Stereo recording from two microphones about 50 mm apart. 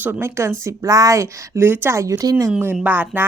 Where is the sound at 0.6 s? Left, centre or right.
Right.